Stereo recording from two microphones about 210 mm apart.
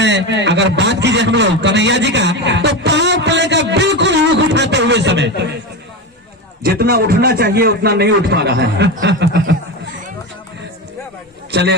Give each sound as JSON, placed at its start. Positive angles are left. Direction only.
{"t": 0.0, "sound": "a man's voice", "side_deg": -55}
{"t": 6.6, "sound": "a man's voice", "side_deg": -45}